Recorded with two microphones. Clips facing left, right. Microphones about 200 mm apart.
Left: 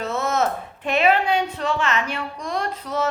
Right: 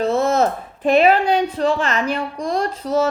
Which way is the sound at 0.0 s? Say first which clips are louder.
Right 6 dB; 30° right (ahead or behind).